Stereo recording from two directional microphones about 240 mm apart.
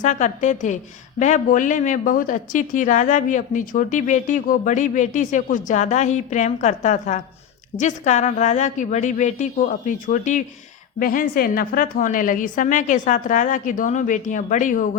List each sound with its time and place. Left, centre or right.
0.0 s speech: left